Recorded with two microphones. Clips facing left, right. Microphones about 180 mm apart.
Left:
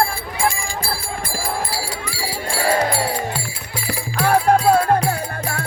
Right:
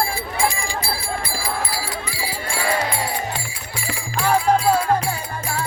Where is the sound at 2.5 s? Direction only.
40° left (ahead or behind).